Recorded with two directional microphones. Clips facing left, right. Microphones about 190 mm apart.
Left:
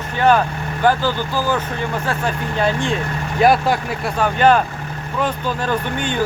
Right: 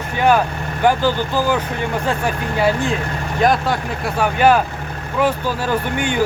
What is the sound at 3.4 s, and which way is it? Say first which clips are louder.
Speech: left 2 dB; 10° left (ahead or behind).